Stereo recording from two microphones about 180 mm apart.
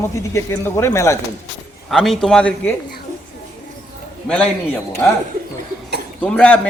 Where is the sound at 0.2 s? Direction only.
15° left (ahead or behind).